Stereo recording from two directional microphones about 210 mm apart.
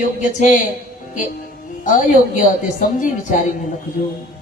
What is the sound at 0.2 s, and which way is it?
Speech, 35° left (ahead or behind).